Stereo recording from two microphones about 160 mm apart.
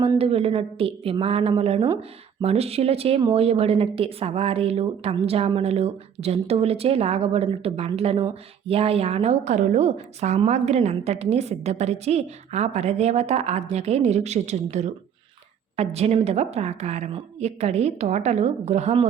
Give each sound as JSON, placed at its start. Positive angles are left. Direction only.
{"t": 0.2, "sound": "a woman's voice", "side_deg": -40}